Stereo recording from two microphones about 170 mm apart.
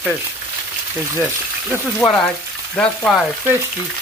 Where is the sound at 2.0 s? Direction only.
20° left (ahead or behind).